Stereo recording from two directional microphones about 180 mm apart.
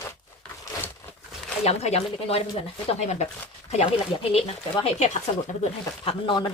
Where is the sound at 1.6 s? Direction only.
35° left (ahead or behind).